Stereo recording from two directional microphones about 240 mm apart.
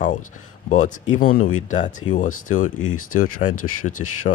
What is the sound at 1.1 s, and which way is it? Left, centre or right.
Speech, left.